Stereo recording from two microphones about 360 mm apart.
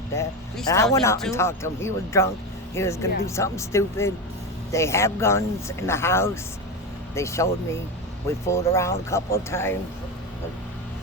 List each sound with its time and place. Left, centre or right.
0.1 s speech: centre